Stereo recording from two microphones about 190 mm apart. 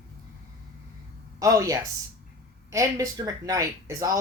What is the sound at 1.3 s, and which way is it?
Speech, 20° right (ahead or behind).